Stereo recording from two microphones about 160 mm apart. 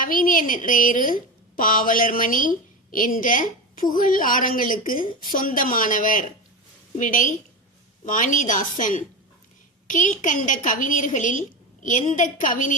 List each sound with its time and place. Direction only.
0.0 s a woman's voice: 60° left (ahead or behind)